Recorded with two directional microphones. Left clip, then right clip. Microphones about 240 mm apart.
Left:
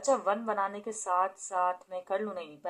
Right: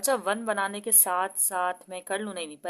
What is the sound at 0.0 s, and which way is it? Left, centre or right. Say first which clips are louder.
Speech: right 1 dB; right.